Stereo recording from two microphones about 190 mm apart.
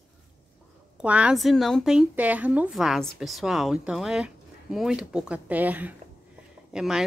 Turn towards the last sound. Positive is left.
turn(degrees=-5)  # may be behind; listen again after turning